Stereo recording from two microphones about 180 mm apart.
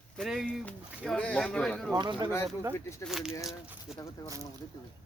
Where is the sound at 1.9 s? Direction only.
25° right (ahead or behind).